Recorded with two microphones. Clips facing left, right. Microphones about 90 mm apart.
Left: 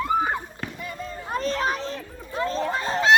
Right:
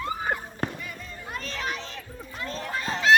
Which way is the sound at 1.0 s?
40° left (ahead or behind).